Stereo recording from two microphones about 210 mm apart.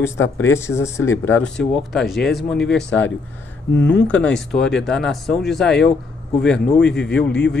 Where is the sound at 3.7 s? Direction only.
55° left (ahead or behind).